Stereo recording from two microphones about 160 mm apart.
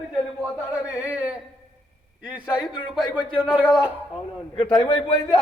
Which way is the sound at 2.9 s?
5° right (ahead or behind).